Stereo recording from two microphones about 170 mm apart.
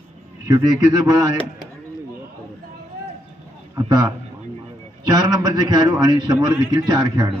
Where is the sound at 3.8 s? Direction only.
20° right (ahead or behind).